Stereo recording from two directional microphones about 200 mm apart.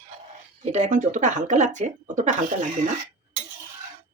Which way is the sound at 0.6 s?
35° right (ahead or behind).